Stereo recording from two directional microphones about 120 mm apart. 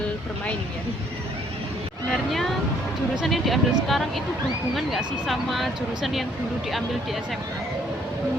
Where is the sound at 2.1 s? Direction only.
Centre (ahead or behind).